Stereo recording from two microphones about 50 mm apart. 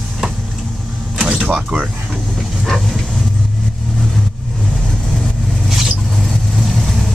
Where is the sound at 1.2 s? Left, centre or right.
Centre.